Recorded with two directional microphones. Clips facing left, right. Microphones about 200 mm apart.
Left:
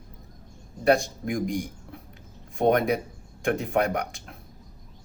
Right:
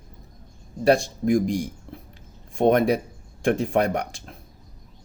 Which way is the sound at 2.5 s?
30° right (ahead or behind).